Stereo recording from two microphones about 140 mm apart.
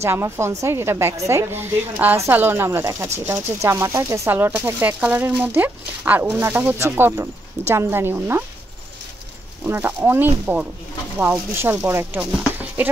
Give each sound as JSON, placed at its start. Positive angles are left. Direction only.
{"t": 0.0, "sound": "a woman's voice", "side_deg": -20}
{"t": 9.7, "sound": "speech", "side_deg": -15}